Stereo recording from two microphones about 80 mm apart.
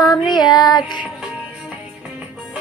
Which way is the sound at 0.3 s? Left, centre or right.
Left.